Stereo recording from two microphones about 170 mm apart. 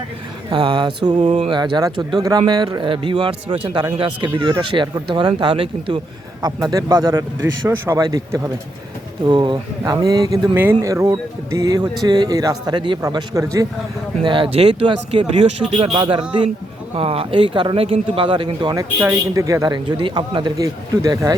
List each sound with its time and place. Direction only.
0.5 s speech: 30° right (ahead or behind)
1.3 s speech: 40° right (ahead or behind)
1.5 s speech: 25° right (ahead or behind)
14.3 s speech: 30° right (ahead or behind)
18.9 s speech: 15° right (ahead or behind)